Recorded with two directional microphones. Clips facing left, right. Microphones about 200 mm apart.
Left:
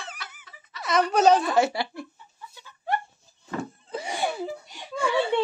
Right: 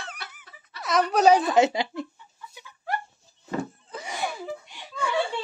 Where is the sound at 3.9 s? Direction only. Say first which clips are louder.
Left 6 dB; 30° left (ahead or behind).